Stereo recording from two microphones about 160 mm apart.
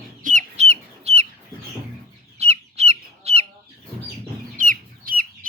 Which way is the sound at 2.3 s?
40° right (ahead or behind).